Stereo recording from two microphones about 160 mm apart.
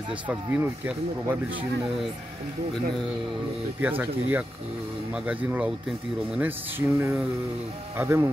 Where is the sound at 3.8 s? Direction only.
10° right (ahead or behind).